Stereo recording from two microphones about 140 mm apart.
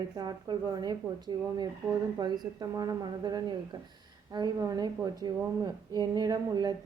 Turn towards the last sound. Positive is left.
turn(degrees=-30)  # may be behind; listen again after turning